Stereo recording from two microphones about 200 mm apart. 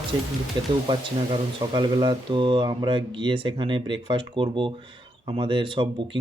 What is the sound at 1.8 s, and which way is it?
Speech, 20° right (ahead or behind).